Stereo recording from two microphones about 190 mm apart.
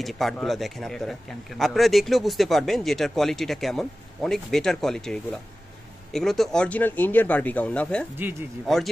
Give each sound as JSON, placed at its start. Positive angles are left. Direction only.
{"t": 0.0, "sound": "speech", "side_deg": 0}